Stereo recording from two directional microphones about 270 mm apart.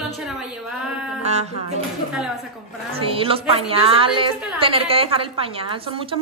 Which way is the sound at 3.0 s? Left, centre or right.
Centre.